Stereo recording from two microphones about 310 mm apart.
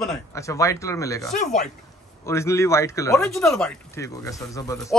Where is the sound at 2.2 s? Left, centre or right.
Centre.